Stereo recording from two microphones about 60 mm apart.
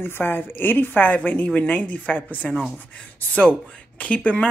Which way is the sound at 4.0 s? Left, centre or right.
Left.